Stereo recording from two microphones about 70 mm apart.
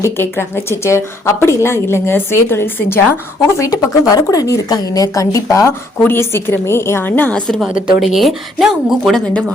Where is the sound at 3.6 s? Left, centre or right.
Left.